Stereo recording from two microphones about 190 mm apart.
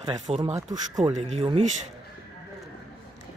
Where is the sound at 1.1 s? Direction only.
35° right (ahead or behind).